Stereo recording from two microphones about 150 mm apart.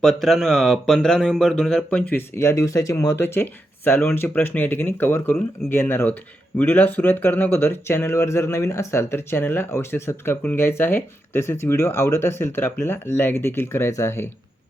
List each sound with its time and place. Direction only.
0.0 s speech: centre (ahead or behind); by 14.3 s 15° left (ahead or behind)